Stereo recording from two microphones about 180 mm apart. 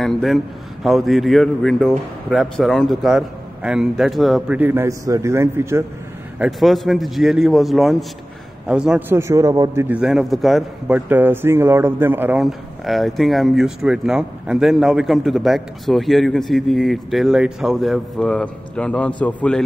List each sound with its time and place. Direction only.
0.0 s speech: centre (ahead or behind)
4.6 s a man's voice: 10° right (ahead or behind)
6.4 s speech: centre (ahead or behind)
9.3 s a man's voice: 20° right (ahead or behind); by 11.0 s centre (ahead or behind)
11.1 s speech: 10° right (ahead or behind); by 19.6 s 5° left (ahead or behind)